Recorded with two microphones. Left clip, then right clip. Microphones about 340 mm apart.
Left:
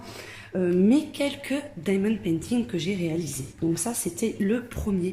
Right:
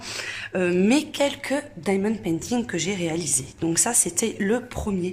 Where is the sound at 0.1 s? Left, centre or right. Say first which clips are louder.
Right 7 dB; right.